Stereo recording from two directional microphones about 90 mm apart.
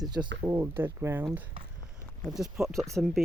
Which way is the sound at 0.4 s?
30° right (ahead or behind).